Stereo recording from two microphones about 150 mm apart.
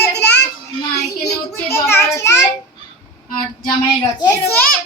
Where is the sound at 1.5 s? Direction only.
15° left (ahead or behind).